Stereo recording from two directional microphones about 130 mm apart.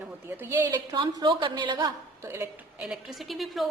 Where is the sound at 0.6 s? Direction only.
30° right (ahead or behind).